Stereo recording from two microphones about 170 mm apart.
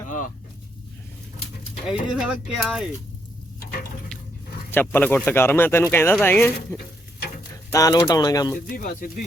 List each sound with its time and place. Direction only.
1.9 s speech: 5° right (ahead or behind)
4.7 s speech: 10° left (ahead or behind)
8.5 s speech: 55° left (ahead or behind)